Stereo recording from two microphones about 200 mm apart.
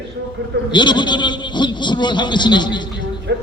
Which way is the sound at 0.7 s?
25° left (ahead or behind).